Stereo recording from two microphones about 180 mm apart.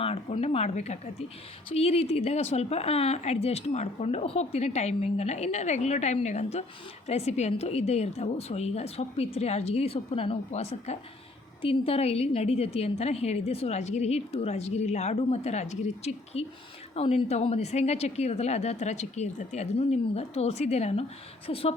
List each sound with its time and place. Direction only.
0.0 s speech: 35° left (ahead or behind)